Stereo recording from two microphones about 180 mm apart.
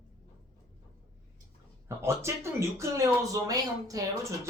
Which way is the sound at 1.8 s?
15° right (ahead or behind).